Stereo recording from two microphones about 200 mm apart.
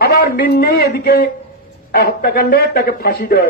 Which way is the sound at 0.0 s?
50° left (ahead or behind).